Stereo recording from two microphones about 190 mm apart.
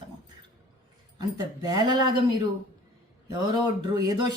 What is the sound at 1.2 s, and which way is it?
Speech, 20° right (ahead or behind).